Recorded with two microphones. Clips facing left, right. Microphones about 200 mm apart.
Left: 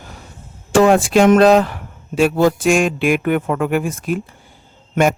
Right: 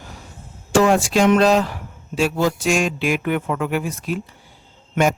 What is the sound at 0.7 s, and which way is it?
A man's voice, 55° left (ahead or behind).